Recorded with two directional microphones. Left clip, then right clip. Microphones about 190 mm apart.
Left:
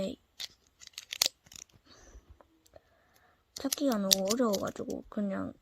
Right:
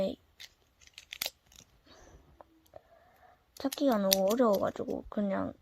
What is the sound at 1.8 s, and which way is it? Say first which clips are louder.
Whispering: right 1 dB; 25° left (ahead or behind).